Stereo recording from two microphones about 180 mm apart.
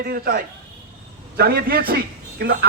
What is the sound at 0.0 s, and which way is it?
A man's voice, 55° right (ahead or behind).